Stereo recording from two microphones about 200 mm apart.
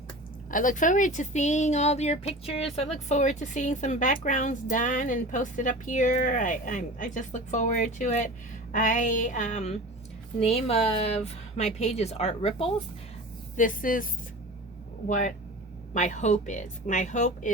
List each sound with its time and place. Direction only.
0.5 s speech: 40° left (ahead or behind)
13.6 s speech: 45° left (ahead or behind)